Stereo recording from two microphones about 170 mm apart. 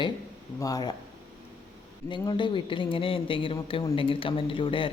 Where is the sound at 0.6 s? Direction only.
25° left (ahead or behind).